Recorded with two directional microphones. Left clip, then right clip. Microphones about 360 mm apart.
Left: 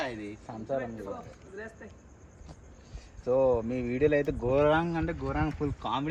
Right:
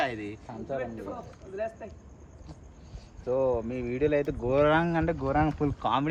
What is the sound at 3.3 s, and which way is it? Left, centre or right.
Speech, left.